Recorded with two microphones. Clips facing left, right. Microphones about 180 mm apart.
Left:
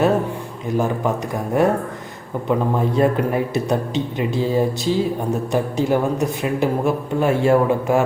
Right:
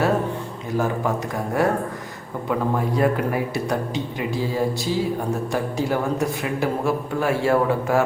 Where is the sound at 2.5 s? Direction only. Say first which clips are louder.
Left 3 dB; 25° left (ahead or behind).